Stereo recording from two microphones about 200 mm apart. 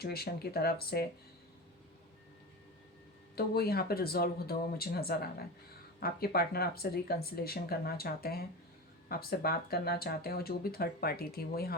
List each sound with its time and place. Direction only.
0.0 s speech: 50° left (ahead or behind)
3.3 s speech: 50° left (ahead or behind)